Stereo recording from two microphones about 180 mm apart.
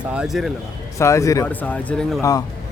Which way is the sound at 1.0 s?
15° left (ahead or behind).